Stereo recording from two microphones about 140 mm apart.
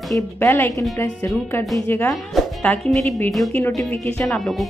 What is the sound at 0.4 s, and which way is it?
Speech, 20° left (ahead or behind).